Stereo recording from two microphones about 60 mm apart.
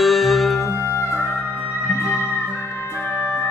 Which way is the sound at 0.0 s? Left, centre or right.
Centre.